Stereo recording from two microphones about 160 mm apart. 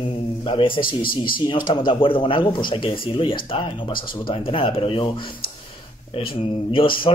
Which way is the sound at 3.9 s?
65° left (ahead or behind).